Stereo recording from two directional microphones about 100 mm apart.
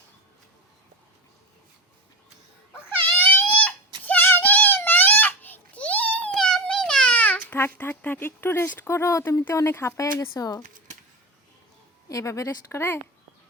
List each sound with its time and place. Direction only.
2.9 s baby cry: 20° left (ahead or behind)
6.3 s baby cry: 5° left (ahead or behind); by 9.4 s 30° left (ahead or behind)
9.4 s speech: 25° left (ahead or behind)
12.0 s speech: 30° left (ahead or behind)